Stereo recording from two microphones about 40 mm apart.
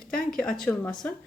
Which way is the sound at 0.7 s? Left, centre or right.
Left.